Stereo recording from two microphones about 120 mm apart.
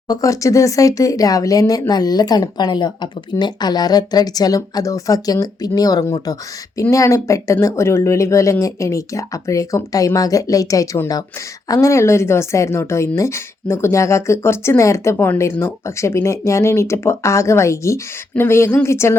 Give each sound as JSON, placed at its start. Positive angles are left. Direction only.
{"t": 0.1, "sound": "a woman's voice", "side_deg": 30}